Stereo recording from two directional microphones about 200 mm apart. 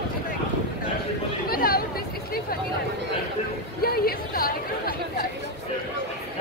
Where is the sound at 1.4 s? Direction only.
50° left (ahead or behind).